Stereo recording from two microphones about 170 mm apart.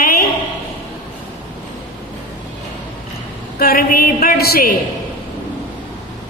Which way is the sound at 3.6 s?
60° left (ahead or behind).